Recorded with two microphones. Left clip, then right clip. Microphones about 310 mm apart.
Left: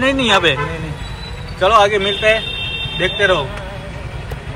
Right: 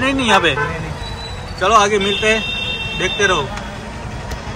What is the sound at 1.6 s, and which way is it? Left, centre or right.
A man's voice, centre.